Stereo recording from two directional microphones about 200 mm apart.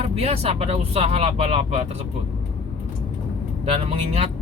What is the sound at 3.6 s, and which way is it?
Speech, 30° right (ahead or behind).